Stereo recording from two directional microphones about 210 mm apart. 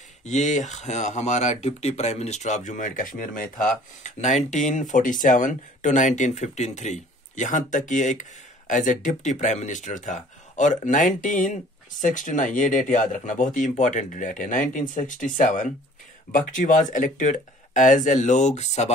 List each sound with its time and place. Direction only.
0.2 s speech: 35° left (ahead or behind)